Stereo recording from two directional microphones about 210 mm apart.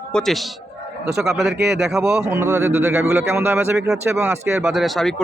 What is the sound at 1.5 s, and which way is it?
Speech, 55° right (ahead or behind).